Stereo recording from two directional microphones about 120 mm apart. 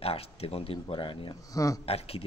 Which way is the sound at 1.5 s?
30° left (ahead or behind).